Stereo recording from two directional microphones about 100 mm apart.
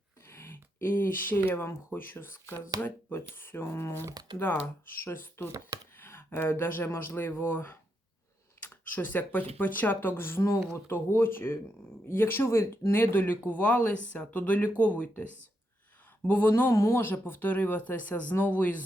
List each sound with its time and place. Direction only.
0.3 s speech: 25° left (ahead or behind)
4.1 s speech: 45° right (ahead or behind)
5.0 s speech: 20° left (ahead or behind)
5.5 s speech: 35° right (ahead or behind)
6.0 s speech: 25° left (ahead or behind)
16.2 s speech: 20° left (ahead or behind)